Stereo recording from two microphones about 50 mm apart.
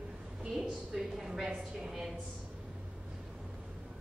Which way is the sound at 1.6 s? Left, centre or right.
Centre.